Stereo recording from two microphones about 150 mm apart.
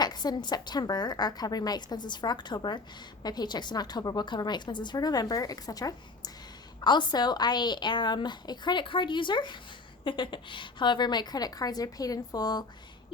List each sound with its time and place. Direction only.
0.0 s a woman's voice: 25° left (ahead or behind)